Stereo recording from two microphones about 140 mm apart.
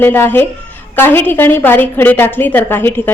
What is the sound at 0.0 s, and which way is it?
A woman's voice, 15° left (ahead or behind).